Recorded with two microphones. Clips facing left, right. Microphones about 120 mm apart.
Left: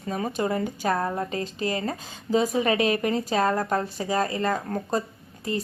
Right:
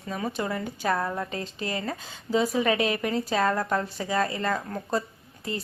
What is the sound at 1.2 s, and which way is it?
Speech, 35° left (ahead or behind).